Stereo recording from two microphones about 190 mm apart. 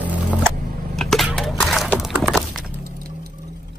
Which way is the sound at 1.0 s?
Centre (ahead or behind).